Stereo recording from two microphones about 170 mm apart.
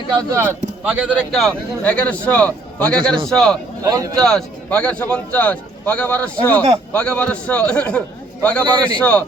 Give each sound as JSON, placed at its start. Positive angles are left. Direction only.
{"t": 0.2, "sound": "speech", "side_deg": -15}
{"t": 3.8, "sound": "speech", "side_deg": -20}
{"t": 4.2, "sound": "a man's voice", "side_deg": 5}